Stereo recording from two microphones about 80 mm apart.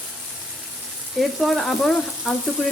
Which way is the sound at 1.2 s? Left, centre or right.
Centre.